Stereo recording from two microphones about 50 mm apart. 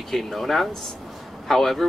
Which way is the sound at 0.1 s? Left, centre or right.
Centre.